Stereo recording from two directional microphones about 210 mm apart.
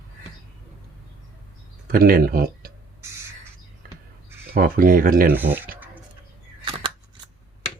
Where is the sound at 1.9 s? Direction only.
45° right (ahead or behind).